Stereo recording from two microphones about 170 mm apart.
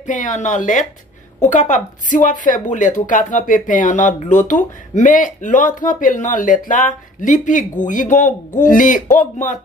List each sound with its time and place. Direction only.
0.0 s a woman's voice: 45° left (ahead or behind)